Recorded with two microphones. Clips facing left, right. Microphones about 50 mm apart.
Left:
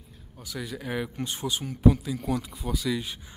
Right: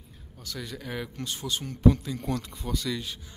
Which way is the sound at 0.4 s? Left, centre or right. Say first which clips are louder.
Left 2 dB; centre.